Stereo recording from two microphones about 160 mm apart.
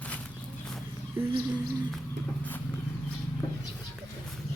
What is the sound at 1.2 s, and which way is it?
Speech, 15° right (ahead or behind).